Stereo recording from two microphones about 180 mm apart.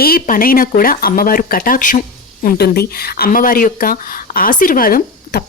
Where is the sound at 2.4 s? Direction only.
60° left (ahead or behind).